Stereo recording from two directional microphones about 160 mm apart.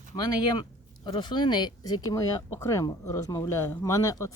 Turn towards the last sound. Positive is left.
turn(degrees=20)  # may be behind; listen again after turning